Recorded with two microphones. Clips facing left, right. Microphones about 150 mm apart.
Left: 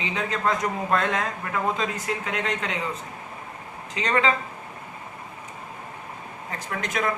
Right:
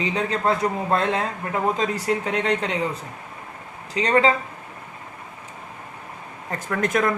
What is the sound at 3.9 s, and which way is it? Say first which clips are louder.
Speech: right 5 dB; 35° right (ahead or behind).